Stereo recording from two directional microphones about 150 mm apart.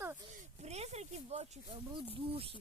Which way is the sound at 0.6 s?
45° right (ahead or behind).